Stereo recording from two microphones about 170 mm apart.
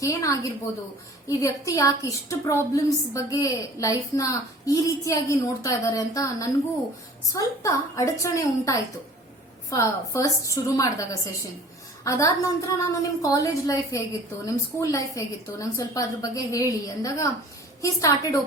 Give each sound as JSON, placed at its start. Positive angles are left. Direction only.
{"t": 0.0, "sound": "a woman's voice", "side_deg": 20}